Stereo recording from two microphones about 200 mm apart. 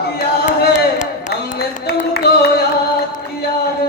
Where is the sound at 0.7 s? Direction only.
40° left (ahead or behind).